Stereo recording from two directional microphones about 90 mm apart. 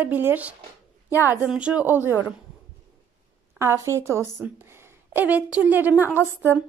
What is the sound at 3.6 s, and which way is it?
A woman's voice, 30° right (ahead or behind).